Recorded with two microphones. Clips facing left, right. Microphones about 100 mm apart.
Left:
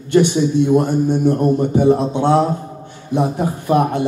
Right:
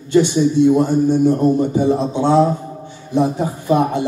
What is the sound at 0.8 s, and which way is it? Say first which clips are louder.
A man's voice: right 2 dB; 60° left (ahead or behind).